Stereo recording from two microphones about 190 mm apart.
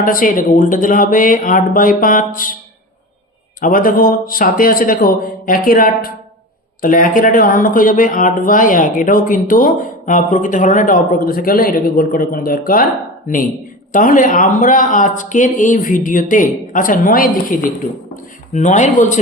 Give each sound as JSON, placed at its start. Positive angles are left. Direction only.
{"t": 0.0, "sound": "speech", "side_deg": 45}
{"t": 3.6, "sound": "speech", "side_deg": 50}